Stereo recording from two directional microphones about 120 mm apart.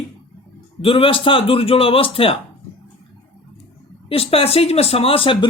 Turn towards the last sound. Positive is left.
turn(degrees=45)  # may be behind; listen again after turning